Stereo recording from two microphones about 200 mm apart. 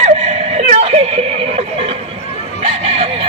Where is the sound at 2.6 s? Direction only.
30° right (ahead or behind).